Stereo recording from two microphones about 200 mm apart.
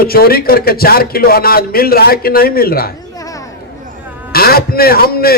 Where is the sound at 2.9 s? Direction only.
20° left (ahead or behind).